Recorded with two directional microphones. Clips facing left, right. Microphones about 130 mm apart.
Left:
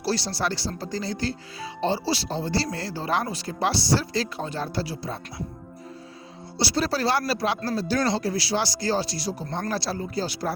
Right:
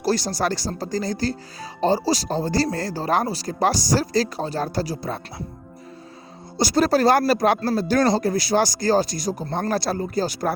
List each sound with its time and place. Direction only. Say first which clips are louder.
0.0 s speech: right 4 dB; 45° right (ahead or behind)
6.6 s speech: right 7 dB; 45° right (ahead or behind)